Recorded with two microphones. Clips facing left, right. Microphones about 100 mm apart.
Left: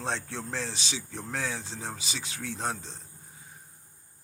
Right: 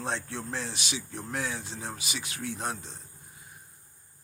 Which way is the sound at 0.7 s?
30° left (ahead or behind).